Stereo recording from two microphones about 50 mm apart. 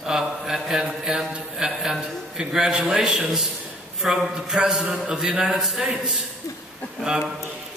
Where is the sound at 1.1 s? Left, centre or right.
Centre.